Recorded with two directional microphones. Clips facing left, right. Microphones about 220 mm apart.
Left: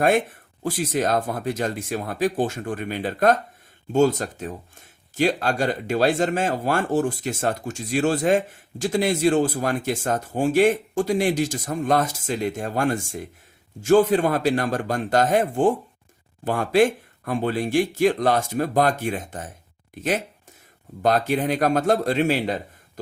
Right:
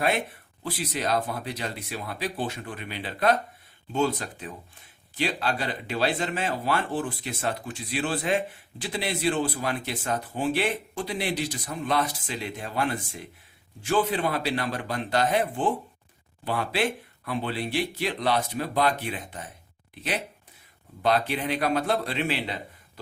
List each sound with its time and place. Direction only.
0.0 s speech: 50° left (ahead or behind)